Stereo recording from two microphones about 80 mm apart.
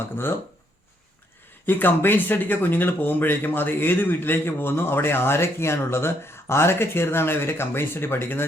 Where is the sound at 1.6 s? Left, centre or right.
Left.